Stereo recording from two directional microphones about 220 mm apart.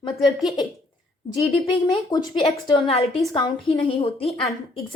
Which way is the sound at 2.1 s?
20° left (ahead or behind).